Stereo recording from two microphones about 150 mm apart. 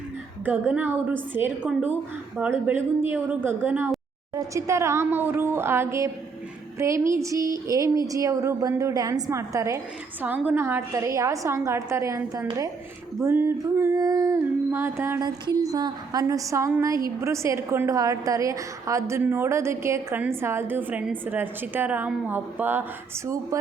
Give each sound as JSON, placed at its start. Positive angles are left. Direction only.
{"t": 0.4, "sound": "a woman's voice", "side_deg": -10}